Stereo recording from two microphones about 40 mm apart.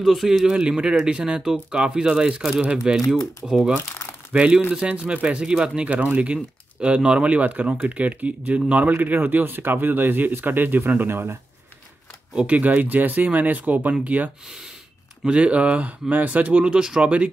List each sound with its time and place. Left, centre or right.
0.0 s speech: centre
0.5 s speech: right
4.3 s speech: right
5.9 s speech: right
12.4 s speech: right
12.6 s speech: right
15.2 s speech: right
16.1 s speech: right